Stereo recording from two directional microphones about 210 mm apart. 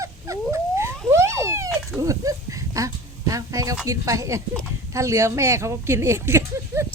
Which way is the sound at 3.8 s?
15° right (ahead or behind).